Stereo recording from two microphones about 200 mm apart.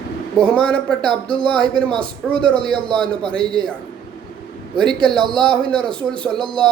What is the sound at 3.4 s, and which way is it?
Speech, 25° right (ahead or behind).